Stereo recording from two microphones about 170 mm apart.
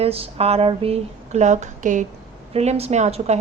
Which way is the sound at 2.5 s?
35° right (ahead or behind).